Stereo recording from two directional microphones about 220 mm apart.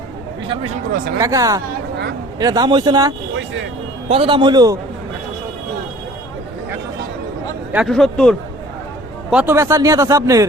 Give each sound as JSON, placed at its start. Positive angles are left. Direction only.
{"t": 1.2, "sound": "speech", "side_deg": -15}
{"t": 3.3, "sound": "vehicle", "side_deg": -55}
{"t": 4.1, "sound": "a man's voice", "side_deg": -25}
{"t": 7.7, "sound": "speech", "side_deg": 0}
{"t": 9.3, "sound": "speech", "side_deg": -10}